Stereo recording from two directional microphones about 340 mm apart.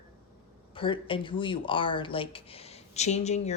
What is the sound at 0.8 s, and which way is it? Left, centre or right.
A woman's voice, centre.